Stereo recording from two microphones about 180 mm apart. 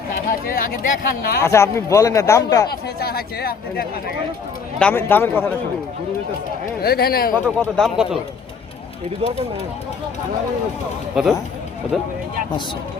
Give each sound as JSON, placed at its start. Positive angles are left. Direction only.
{"t": 0.1, "sound": "speech", "side_deg": 55}
{"t": 1.4, "sound": "speech", "side_deg": 15}
{"t": 3.0, "sound": "speech", "side_deg": 60}
{"t": 4.8, "sound": "speech", "side_deg": 10}
{"t": 6.8, "sound": "speech", "side_deg": 60}
{"t": 7.6, "sound": "speech", "side_deg": -5}
{"t": 9.2, "sound": "speech", "side_deg": -30}
{"t": 11.1, "sound": "speech", "side_deg": 0}